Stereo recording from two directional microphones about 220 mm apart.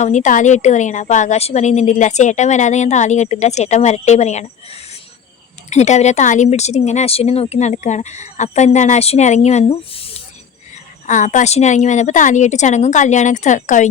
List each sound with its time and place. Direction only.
0.0 s a woman's voice: 35° left (ahead or behind)